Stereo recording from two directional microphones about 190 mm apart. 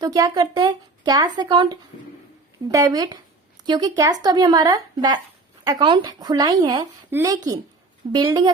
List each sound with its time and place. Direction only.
0.0 s speech: 20° right (ahead or behind)